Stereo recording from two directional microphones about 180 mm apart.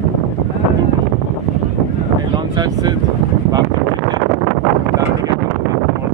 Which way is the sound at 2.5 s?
25° right (ahead or behind).